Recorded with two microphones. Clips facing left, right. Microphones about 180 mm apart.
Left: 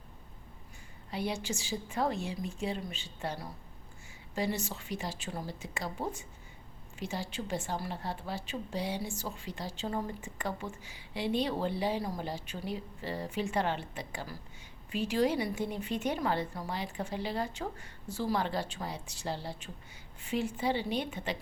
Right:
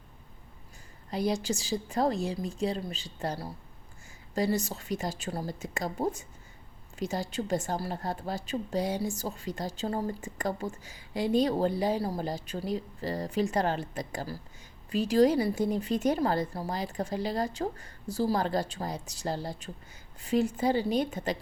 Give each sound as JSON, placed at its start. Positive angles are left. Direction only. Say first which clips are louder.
{"t": 1.1, "sound": "a woman's voice", "louder": "right 6 dB", "side_deg": -40}